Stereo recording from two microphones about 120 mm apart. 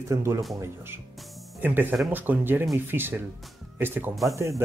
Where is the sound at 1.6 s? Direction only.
15° right (ahead or behind).